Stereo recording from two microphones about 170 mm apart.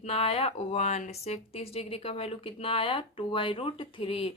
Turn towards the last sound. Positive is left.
turn(degrees=35)  # may be behind; listen again after turning